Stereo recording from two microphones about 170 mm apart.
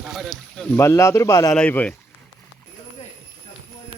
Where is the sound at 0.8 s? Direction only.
15° left (ahead or behind).